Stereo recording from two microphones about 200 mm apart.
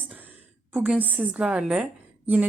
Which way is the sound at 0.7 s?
5° right (ahead or behind).